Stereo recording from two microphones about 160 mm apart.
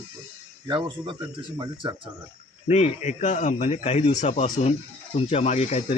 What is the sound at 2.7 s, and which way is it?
Speech, 45° left (ahead or behind).